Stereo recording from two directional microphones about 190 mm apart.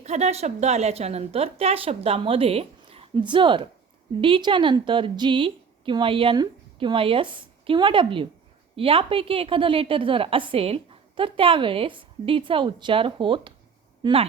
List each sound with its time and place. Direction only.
0.0 s a woman's voice: 35° right (ahead or behind)